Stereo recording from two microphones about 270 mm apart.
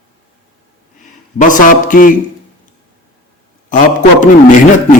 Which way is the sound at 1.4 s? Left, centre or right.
Left.